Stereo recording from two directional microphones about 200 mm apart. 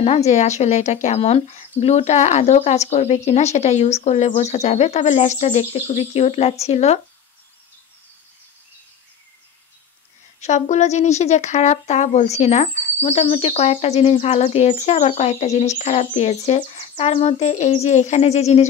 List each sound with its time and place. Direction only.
0.0 s speech: 30° left (ahead or behind)
10.4 s speech: 35° left (ahead or behind)